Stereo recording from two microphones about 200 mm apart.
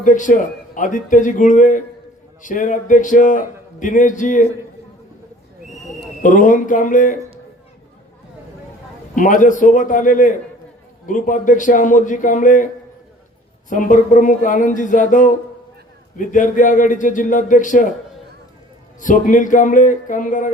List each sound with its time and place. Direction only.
0.0 s a man's voice: 40° left (ahead or behind)
6.2 s a man's voice: 40° left (ahead or behind)
9.1 s a man's voice: 40° left (ahead or behind)
13.7 s a man's voice: 40° left (ahead or behind)
18.9 s a man's voice: 40° left (ahead or behind)